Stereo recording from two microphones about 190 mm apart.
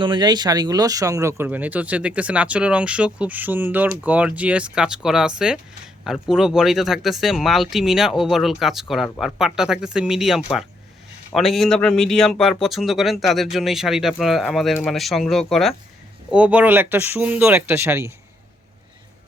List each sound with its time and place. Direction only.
0.0 s speech: 25° right (ahead or behind)